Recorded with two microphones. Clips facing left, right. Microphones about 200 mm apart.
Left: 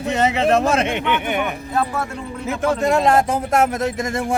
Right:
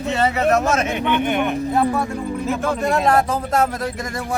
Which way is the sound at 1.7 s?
20° right (ahead or behind).